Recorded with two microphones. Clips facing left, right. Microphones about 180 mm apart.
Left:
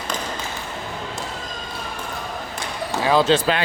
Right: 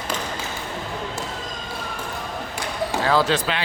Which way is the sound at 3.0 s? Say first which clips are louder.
Left 4 dB; 20° left (ahead or behind).